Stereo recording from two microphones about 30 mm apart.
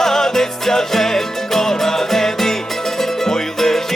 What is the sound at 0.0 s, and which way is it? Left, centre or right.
Music, centre.